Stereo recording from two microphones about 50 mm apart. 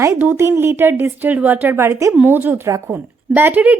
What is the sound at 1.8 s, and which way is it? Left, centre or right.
Speech, right.